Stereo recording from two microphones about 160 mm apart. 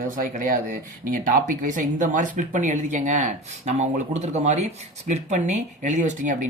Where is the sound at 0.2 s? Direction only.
60° right (ahead or behind).